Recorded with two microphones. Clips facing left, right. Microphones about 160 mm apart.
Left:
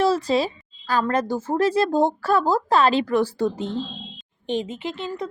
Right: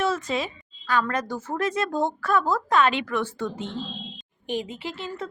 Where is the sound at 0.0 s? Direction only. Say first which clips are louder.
Left 6 dB; 35° left (ahead or behind).